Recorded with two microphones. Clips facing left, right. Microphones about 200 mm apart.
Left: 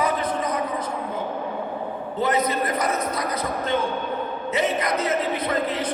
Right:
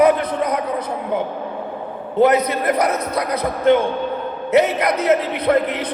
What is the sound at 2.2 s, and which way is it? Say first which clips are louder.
A man's voice: right 7 dB; 70° right (ahead or behind).